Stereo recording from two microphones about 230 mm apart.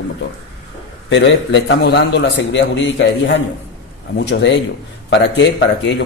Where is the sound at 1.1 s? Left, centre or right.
Left.